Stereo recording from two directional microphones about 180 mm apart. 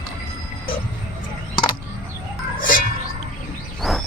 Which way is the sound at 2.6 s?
50° left (ahead or behind).